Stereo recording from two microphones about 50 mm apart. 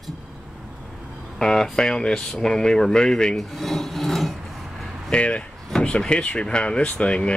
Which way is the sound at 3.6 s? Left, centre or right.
Centre.